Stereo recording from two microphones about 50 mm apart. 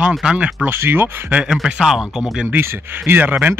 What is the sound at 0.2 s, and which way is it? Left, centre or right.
Speech, right.